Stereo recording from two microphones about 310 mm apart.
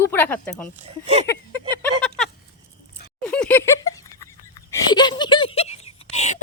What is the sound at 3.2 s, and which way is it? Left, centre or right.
Laughter, centre.